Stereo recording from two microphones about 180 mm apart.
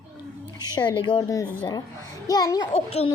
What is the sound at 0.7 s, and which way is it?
A woman's voice, 25° left (ahead or behind).